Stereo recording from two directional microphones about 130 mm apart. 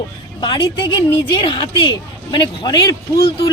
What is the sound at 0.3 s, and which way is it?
Speech, 35° left (ahead or behind).